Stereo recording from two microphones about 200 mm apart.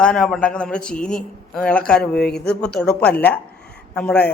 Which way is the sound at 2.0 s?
50° left (ahead or behind).